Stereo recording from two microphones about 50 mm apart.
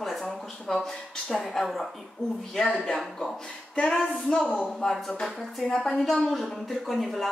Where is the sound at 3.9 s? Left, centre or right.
Centre.